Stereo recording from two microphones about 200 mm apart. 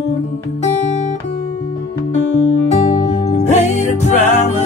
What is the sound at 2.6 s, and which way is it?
Music, 35° left (ahead or behind).